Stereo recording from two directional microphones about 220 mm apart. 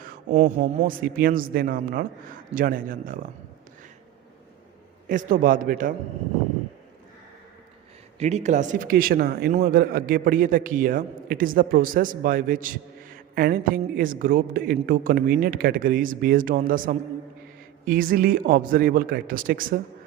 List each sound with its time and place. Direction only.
0.3 s speech: 30° right (ahead or behind)
1.0 s a man's voice: 40° right (ahead or behind)
5.0 s a man's voice: 40° right (ahead or behind)
8.2 s a man's voice: 30° right (ahead or behind)